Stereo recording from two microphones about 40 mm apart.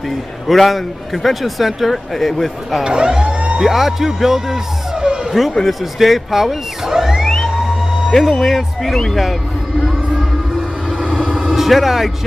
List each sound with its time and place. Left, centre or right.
0.5 s a man's voice: centre
2.8 s emergency vehicle: right
3.6 s speech: centre
4.9 s a sound: right
5.7 s speech: centre
8.1 s a man's voice: centre
11.4 s speech: centre